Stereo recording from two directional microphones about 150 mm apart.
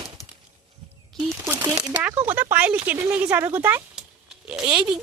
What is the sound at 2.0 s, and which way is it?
Speech, 10° right (ahead or behind).